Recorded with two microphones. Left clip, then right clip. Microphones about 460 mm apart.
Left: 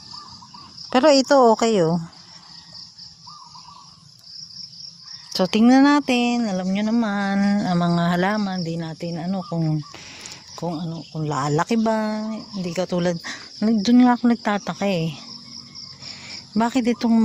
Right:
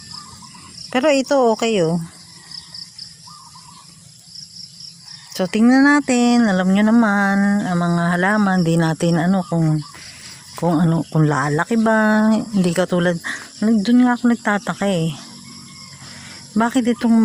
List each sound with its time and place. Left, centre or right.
0.9 s speech: left
5.3 s speech: left
16.6 s speech: left